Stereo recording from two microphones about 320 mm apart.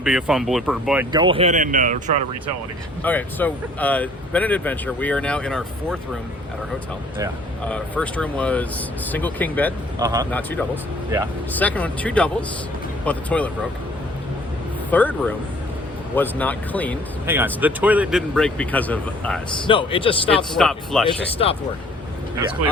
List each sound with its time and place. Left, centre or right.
0.0 s speech: centre
1.1 s speech: centre
3.0 s speech: centre
7.7 s speech: centre
10.0 s speech: centre
10.3 s speech: centre
14.8 s speech: centre
17.2 s speech: centre
19.6 s a man's voice: centre
20.5 s speech: centre
21.1 s a man's voice: centre